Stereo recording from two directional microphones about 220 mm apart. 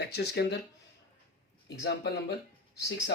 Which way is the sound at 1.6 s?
50° left (ahead or behind).